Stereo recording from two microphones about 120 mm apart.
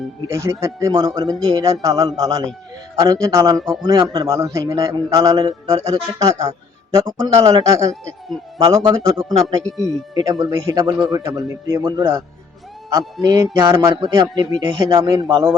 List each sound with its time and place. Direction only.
0.3 s a man's voice: 25° right (ahead or behind)
13.2 s a man's voice: 30° right (ahead or behind)